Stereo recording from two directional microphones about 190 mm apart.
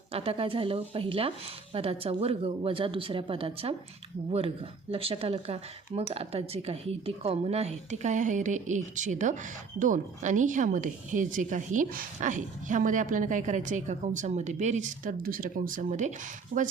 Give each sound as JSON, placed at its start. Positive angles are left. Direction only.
{"t": 0.1, "sound": "a woman's voice", "side_deg": -30}